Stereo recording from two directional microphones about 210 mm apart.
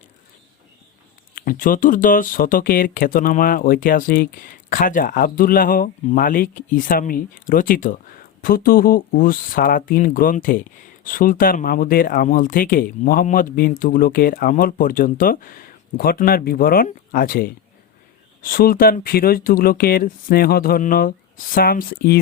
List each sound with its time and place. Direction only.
1.4 s speech: 40° left (ahead or behind)